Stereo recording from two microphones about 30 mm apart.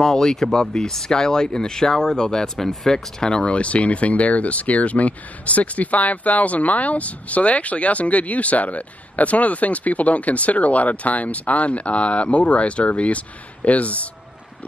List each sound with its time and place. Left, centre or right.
0.0 s speech: centre
2.4 s speech: centre
2.9 s speech: left